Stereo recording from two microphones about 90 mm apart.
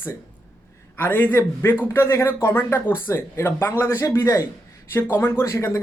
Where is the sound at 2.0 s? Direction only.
35° left (ahead or behind).